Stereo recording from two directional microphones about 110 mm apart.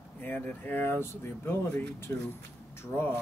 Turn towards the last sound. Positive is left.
turn(degrees=20)  # may be behind; listen again after turning